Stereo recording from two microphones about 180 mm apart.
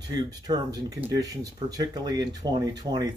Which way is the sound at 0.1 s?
20° right (ahead or behind).